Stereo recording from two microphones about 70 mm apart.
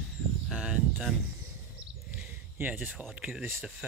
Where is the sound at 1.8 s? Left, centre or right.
Centre.